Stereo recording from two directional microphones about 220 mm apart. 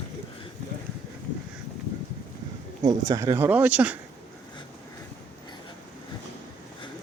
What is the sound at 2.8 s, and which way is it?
Speech, 15° right (ahead or behind).